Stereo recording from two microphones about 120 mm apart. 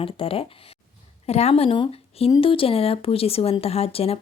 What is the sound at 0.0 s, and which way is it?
A woman's voice, 50° left (ahead or behind).